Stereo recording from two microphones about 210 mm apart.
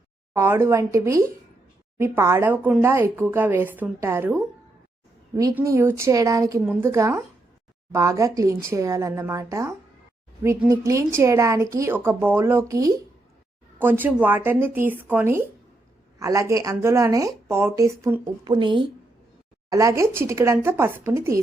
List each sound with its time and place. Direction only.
0.3 s a woman's voice: 10° right (ahead or behind)